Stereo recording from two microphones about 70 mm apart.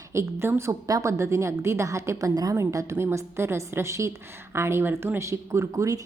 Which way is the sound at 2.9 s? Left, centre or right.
Right.